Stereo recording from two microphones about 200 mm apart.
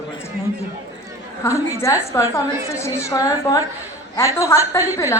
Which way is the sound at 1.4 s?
15° left (ahead or behind).